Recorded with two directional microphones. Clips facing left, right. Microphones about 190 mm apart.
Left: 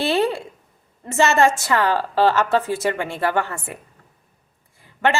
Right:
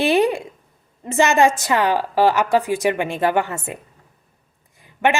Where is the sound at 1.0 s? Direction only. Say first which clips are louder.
Right 1 dB; 15° right (ahead or behind).